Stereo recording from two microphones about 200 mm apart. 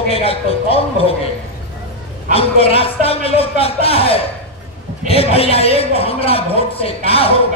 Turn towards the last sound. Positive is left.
turn(degrees=30)  # may be behind; listen again after turning